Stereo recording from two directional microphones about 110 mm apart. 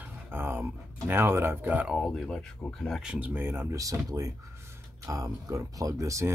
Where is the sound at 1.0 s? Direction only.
20° right (ahead or behind).